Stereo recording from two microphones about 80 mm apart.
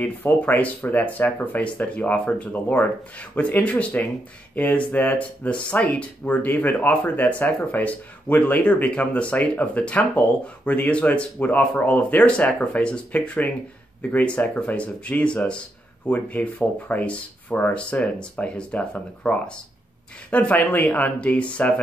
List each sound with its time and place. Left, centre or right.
0.0 s speech: left